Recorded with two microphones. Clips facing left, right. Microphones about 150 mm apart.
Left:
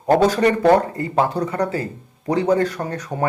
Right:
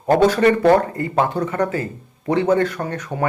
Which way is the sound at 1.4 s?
40° left (ahead or behind).